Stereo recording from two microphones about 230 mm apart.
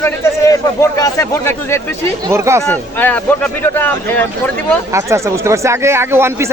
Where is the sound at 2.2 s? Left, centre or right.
Centre.